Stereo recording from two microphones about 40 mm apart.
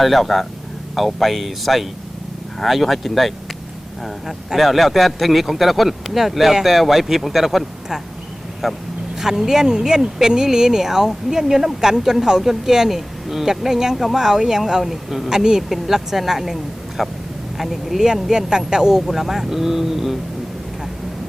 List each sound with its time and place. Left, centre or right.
0.0 s speech: centre
8.6 s speech: centre
18.0 s speech: centre
19.0 s speech: centre